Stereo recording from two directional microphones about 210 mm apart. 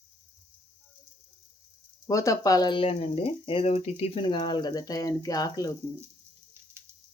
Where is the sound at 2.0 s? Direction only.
15° left (ahead or behind).